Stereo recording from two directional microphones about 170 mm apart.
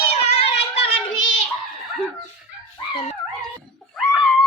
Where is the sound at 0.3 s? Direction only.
35° left (ahead or behind).